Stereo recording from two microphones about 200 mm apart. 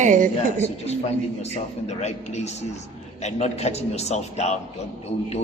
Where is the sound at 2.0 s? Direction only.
35° left (ahead or behind).